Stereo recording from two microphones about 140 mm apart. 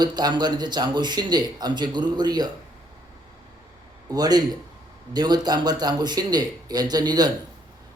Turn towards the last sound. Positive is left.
turn(degrees=-30)  # may be behind; listen again after turning